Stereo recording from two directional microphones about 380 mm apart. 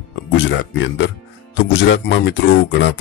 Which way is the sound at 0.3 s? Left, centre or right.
Left.